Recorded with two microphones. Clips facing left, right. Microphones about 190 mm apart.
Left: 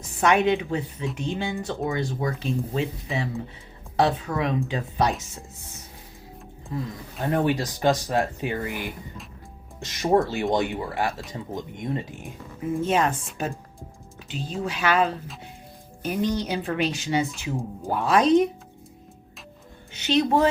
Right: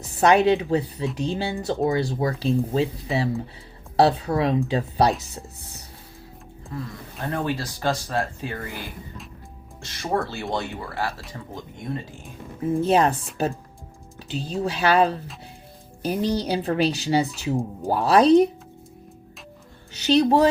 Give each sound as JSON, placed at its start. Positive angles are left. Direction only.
{"t": 0.0, "sound": "speech", "side_deg": -35}
{"t": 7.3, "sound": "speech", "side_deg": 20}
{"t": 12.8, "sound": "speech", "side_deg": -35}
{"t": 19.9, "sound": "speech", "side_deg": -35}